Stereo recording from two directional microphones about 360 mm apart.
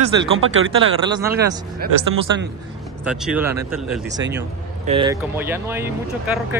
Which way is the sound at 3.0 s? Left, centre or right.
Centre.